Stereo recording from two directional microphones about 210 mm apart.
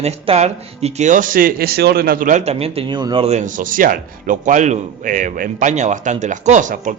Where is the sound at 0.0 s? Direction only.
30° right (ahead or behind).